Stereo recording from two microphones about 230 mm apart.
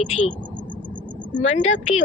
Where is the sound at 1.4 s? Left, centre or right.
Left.